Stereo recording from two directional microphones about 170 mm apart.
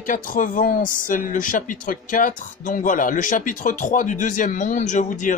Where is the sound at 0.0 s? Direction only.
50° left (ahead or behind).